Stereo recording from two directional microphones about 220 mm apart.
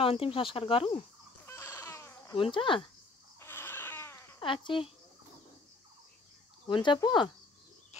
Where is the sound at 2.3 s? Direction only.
25° left (ahead or behind).